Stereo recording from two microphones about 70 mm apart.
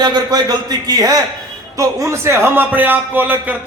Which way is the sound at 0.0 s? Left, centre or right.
Right.